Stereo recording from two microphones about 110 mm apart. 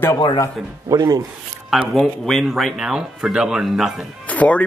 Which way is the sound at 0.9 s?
35° right (ahead or behind).